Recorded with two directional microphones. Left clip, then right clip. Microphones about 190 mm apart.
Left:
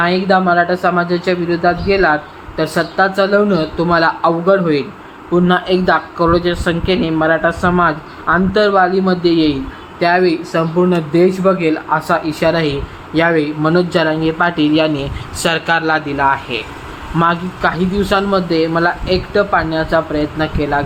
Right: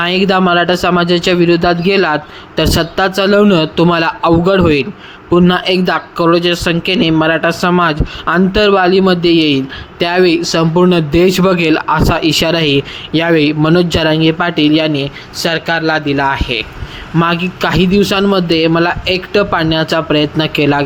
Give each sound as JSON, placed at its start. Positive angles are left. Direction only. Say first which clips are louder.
{"t": 0.0, "sound": "speech", "louder": "right 1 dB", "side_deg": -30}